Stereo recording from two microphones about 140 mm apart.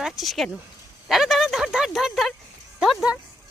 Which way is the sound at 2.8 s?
5° right (ahead or behind).